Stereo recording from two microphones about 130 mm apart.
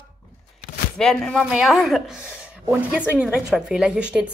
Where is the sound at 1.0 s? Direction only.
5° left (ahead or behind).